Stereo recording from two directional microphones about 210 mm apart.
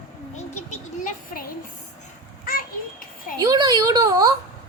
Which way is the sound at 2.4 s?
40° left (ahead or behind).